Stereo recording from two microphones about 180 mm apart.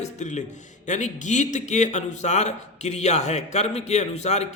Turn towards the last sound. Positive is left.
turn(degrees=35)  # may be behind; listen again after turning